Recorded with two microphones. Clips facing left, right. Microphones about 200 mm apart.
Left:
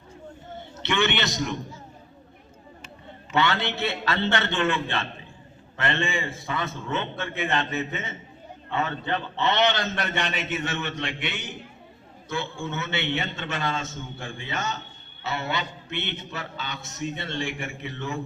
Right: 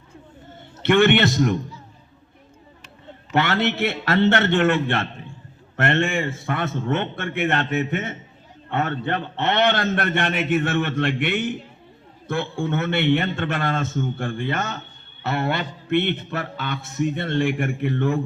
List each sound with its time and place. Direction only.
0.8 s speech: 55° right (ahead or behind)
3.3 s a man's voice: 55° right (ahead or behind)